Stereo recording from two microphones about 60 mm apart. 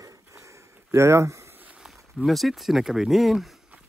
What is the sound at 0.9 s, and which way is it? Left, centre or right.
Speech, right.